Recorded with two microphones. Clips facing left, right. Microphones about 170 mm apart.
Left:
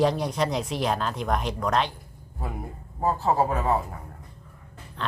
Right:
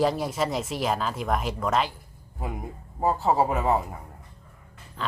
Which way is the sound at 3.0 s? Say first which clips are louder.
Right 1 dB; 15° right (ahead or behind).